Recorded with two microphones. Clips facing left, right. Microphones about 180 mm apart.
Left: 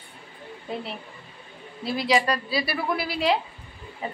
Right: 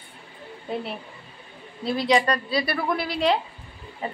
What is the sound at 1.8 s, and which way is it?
A woman's voice, 5° left (ahead or behind).